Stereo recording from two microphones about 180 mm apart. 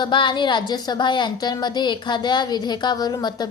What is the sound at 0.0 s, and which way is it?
A woman's voice, 25° left (ahead or behind).